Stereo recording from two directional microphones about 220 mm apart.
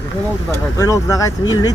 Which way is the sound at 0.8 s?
15° left (ahead or behind).